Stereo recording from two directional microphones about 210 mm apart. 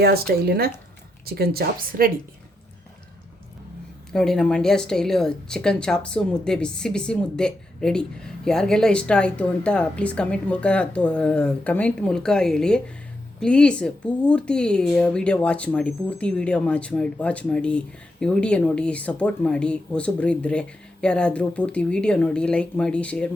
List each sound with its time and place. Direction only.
0.0 s speech: 50° right (ahead or behind)
4.1 s speech: 5° left (ahead or behind)